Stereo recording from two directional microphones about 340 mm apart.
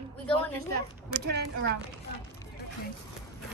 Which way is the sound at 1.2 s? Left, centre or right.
Right.